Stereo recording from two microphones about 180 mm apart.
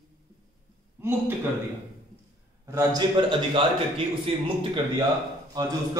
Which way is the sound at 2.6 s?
20° right (ahead or behind).